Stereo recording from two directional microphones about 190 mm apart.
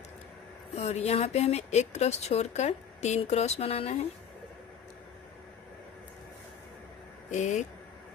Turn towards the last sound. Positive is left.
turn(degrees=40)  # may be behind; listen again after turning